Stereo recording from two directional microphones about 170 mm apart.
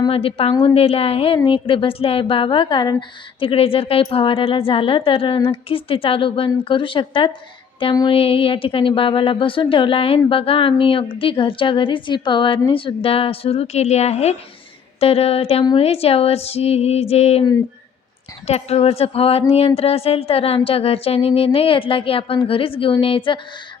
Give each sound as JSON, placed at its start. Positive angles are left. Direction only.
{"t": 0.0, "sound": "a woman's voice", "side_deg": 35}
{"t": 18.4, "sound": "a woman's voice", "side_deg": 35}